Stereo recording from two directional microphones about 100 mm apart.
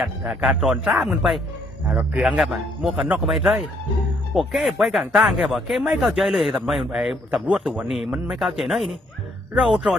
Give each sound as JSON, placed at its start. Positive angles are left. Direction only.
{"t": 0.0, "sound": "speech", "side_deg": -5}
{"t": 1.9, "sound": "speech", "side_deg": -15}